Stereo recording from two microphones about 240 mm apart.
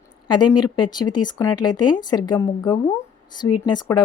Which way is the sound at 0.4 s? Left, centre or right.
Left.